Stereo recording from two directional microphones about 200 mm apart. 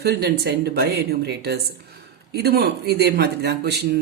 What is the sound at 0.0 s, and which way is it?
Speech, 55° right (ahead or behind).